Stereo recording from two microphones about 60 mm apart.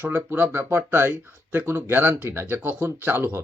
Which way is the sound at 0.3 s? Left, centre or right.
Right.